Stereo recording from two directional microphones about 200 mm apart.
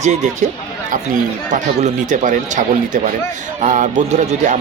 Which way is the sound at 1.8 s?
40° right (ahead or behind).